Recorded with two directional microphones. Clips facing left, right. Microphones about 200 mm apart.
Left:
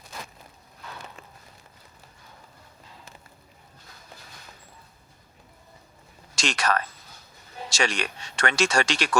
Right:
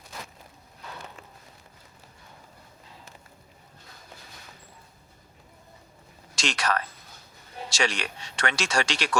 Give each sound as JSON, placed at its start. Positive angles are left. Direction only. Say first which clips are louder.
{"t": 6.3, "sound": "speech", "louder": "left 2 dB", "side_deg": 45}